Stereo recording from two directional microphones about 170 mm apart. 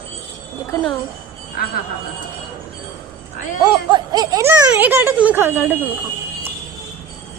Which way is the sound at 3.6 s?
25° right (ahead or behind).